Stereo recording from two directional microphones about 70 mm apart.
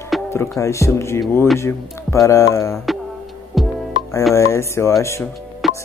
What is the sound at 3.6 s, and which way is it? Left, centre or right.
Music, centre.